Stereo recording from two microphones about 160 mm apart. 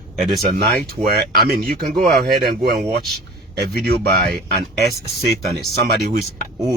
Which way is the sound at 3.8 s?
80° right.